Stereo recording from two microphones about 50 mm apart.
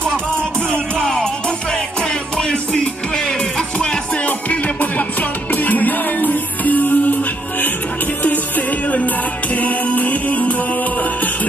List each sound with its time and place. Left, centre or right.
1.0 s music: centre
4.3 s music: left